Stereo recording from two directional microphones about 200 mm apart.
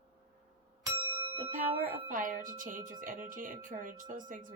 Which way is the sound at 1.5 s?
40° right (ahead or behind).